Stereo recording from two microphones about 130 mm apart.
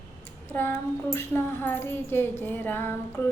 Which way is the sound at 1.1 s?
20° left (ahead or behind).